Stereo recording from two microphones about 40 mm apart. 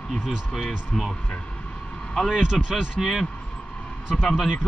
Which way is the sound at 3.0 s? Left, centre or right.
Centre.